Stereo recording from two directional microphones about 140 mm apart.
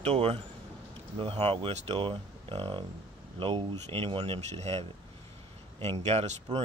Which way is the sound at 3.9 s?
40° right (ahead or behind).